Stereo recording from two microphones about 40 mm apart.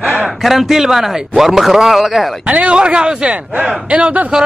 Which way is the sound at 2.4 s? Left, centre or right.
Right.